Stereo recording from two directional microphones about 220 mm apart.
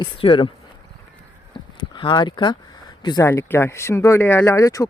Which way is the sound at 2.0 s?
20° left (ahead or behind).